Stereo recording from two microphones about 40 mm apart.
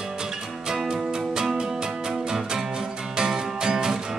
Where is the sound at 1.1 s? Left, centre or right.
Centre.